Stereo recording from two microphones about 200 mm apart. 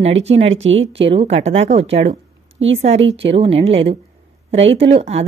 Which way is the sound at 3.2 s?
30° right (ahead or behind).